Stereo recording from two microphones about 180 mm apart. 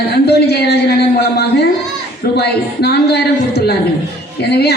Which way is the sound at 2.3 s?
65° left (ahead or behind).